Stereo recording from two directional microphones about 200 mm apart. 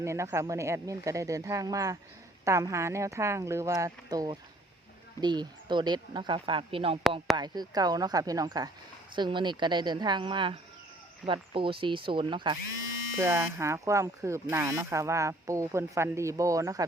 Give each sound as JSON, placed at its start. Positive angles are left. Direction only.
{"t": 0.0, "sound": "speech", "side_deg": -15}